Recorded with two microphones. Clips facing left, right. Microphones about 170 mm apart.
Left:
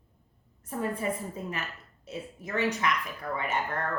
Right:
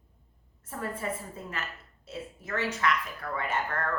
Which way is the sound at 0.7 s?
15° left (ahead or behind).